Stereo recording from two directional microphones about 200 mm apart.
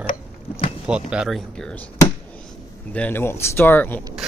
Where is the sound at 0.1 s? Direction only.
30° left (ahead or behind).